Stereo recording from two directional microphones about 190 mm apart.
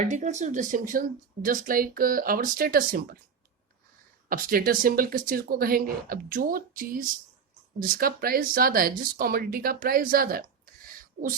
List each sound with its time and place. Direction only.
0.0 s speech: 40° right (ahead or behind)
4.3 s speech: 50° right (ahead or behind)
10.8 s a sound: 45° right (ahead or behind)